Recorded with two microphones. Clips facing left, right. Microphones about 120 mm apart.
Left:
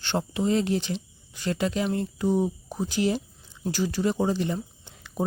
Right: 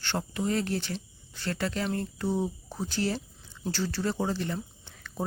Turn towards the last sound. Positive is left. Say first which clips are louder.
# left 5 dB
turn(degrees=15)  # may be behind; listen again after turning